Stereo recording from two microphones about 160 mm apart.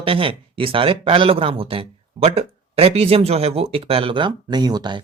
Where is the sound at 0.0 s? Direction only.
35° right (ahead or behind).